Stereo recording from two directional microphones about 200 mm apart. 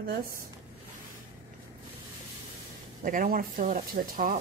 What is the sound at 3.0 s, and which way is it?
Speech, 40° right (ahead or behind).